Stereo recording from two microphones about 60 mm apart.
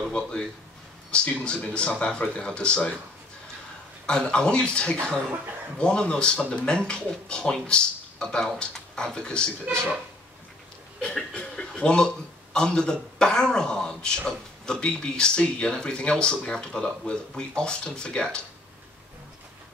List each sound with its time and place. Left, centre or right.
0.1 s speech: centre
4.0 s speech: centre
11.0 s chuckle: centre
12.5 s speech: centre